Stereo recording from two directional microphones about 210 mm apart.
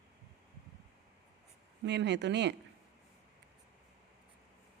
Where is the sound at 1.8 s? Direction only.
55° right (ahead or behind).